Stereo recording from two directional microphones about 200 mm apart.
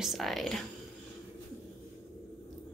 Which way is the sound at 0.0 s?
Centre (ahead or behind).